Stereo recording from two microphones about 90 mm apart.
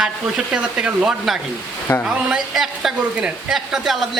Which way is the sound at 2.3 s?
5° right (ahead or behind).